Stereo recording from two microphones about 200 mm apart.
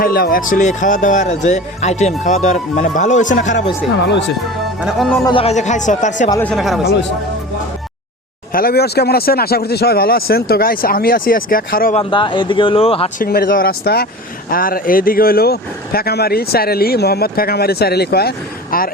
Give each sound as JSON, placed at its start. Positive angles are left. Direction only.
{"t": 0.0, "sound": "speech", "side_deg": 50}
{"t": 4.8, "sound": "speech", "side_deg": 0}
{"t": 5.2, "sound": "speech", "side_deg": 25}
{"t": 6.4, "sound": "speech", "side_deg": 0}
{"t": 8.5, "sound": "speech", "side_deg": 50}
{"t": 11.9, "sound": "speech", "side_deg": 25}
{"t": 13.1, "sound": "speech", "side_deg": 50}